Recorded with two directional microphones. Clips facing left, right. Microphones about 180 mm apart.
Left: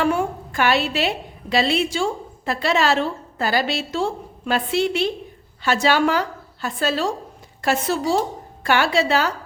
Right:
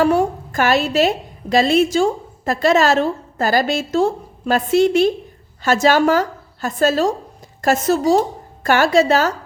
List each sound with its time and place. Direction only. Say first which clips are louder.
0.0 s a woman's voice: right 5 dB; 40° right (ahead or behind)